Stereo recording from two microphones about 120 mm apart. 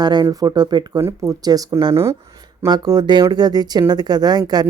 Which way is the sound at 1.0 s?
25° right (ahead or behind).